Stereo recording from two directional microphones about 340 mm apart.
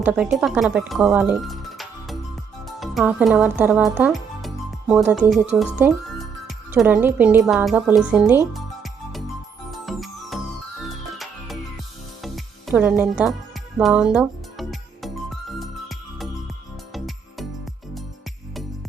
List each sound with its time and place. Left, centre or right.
0.0 s speech: centre
8.4 s music: centre